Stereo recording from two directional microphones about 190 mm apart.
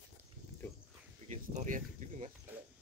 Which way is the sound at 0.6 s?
10° left (ahead or behind).